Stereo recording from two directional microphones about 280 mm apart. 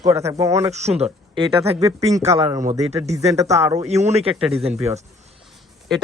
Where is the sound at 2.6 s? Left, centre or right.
Right.